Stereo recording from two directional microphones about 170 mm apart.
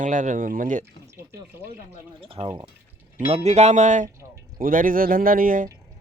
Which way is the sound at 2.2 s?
35° right (ahead or behind).